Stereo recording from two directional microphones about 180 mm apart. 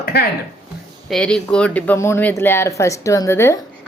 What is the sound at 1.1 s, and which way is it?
Speech, 5° left (ahead or behind).